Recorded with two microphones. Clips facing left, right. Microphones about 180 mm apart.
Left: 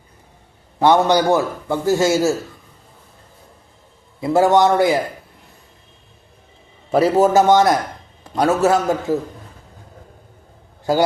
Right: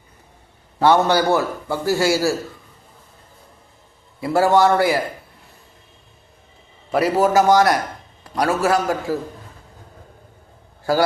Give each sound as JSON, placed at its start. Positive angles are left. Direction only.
{"t": 0.8, "sound": "a man's voice", "side_deg": 15}
{"t": 4.2, "sound": "a man's voice", "side_deg": 20}
{"t": 6.9, "sound": "a man's voice", "side_deg": 25}